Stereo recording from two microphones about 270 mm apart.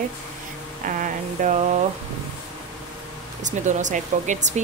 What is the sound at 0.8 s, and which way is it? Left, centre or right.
Speech, right.